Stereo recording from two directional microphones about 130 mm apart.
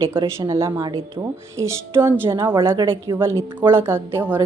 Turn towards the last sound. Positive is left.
turn(degrees=-15)  # may be behind; listen again after turning